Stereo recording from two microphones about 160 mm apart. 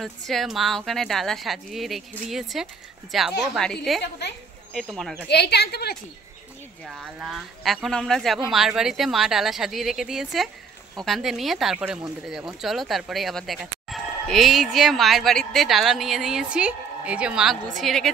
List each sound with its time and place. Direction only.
0.0 s speech: centre (ahead or behind)
5.3 s a woman's voice: 90° left
6.8 s speech: centre (ahead or behind)